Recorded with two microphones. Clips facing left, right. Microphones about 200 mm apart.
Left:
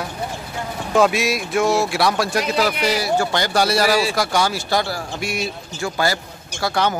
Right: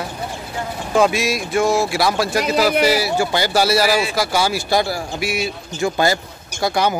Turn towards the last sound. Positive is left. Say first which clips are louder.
# right 2 dB
turn(degrees=-15)  # may be behind; listen again after turning